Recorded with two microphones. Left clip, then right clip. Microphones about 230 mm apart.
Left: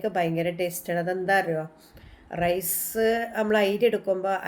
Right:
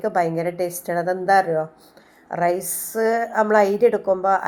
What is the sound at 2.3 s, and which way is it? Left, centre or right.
Speech, centre.